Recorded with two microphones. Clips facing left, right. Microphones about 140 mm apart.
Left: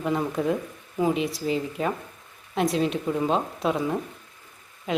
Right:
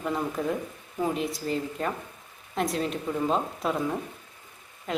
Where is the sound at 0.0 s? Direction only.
Centre (ahead or behind).